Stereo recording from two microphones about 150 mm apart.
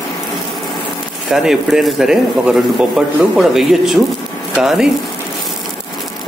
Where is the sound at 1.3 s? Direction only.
Centre (ahead or behind).